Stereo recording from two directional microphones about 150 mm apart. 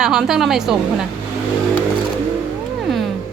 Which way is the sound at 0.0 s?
5° right (ahead or behind).